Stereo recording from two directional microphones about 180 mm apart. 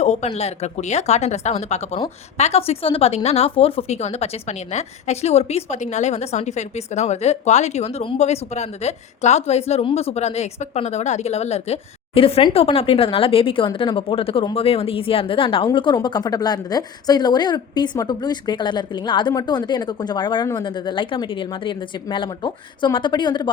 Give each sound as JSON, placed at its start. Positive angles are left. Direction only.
{"t": 0.0, "sound": "a woman's voice", "side_deg": 40}